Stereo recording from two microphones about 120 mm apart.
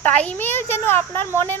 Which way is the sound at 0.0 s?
10° left (ahead or behind).